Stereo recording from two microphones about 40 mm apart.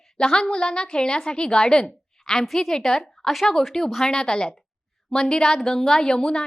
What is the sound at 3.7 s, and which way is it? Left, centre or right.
A woman's voice, centre.